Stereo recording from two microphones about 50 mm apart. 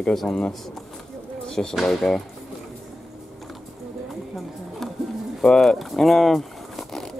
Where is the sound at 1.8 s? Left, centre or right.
Centre.